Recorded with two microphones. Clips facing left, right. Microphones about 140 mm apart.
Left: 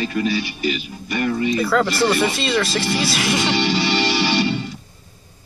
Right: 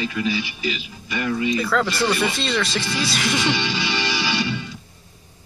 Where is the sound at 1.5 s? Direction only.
5° left (ahead or behind).